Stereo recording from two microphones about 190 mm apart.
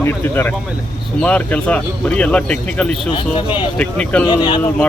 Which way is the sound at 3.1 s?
25° left (ahead or behind).